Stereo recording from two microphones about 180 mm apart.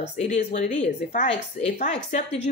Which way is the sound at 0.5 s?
40° left (ahead or behind).